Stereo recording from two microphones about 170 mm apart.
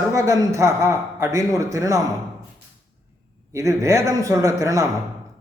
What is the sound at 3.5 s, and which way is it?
A man's voice, 20° right (ahead or behind).